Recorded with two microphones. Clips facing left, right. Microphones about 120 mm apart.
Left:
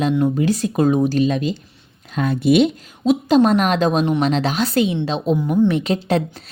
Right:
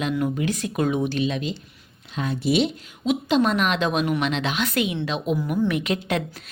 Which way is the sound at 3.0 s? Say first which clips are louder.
Left 6 dB; 40° left (ahead or behind).